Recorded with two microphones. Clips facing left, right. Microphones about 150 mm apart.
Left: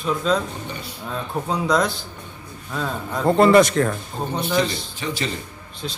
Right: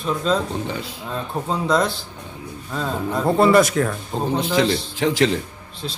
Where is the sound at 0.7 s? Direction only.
90° right.